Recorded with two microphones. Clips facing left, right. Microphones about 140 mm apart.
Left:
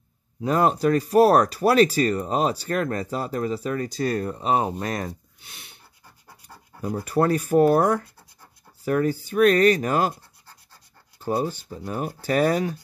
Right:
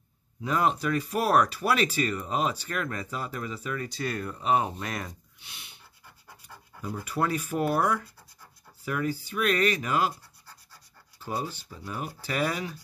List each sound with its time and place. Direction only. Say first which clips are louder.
0.4 s speech: left 6 dB; 40° left (ahead or behind)
11.1 s speech: left 8 dB; 45° left (ahead or behind)